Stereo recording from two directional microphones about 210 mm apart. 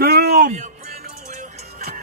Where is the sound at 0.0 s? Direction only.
50° right (ahead or behind).